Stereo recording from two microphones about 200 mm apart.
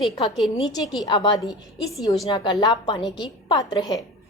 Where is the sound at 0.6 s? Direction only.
20° left (ahead or behind).